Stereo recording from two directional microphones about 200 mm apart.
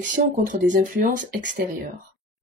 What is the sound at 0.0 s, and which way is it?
Speech, 40° right (ahead or behind).